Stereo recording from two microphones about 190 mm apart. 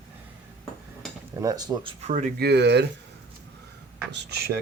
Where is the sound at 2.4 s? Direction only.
60° right (ahead or behind).